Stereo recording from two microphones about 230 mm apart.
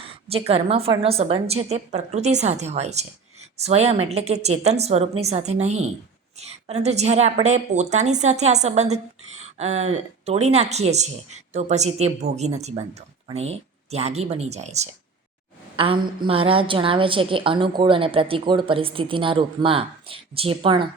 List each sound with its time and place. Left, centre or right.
0.3 s a woman's voice: right